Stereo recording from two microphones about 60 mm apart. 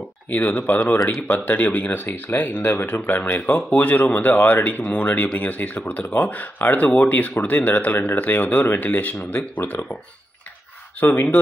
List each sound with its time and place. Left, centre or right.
0.5 s speech: left
11.0 s speech: left